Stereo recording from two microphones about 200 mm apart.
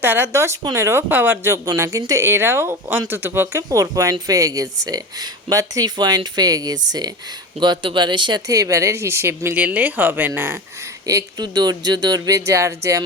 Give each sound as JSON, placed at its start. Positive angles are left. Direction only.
{"t": 0.0, "sound": "speech", "side_deg": -10}